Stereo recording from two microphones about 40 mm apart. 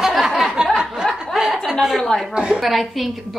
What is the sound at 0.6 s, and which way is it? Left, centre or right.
Snicker, centre.